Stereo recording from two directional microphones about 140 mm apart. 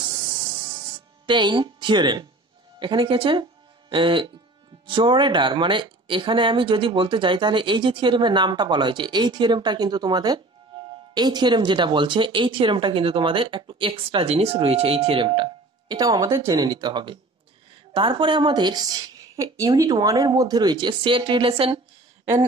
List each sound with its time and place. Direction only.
1.2 s speech: 35° right (ahead or behind)